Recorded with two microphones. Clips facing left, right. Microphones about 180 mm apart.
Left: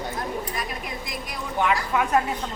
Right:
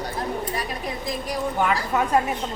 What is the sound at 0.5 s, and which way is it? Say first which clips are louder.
A woman's voice: right 3 dB; 35° right (ahead or behind).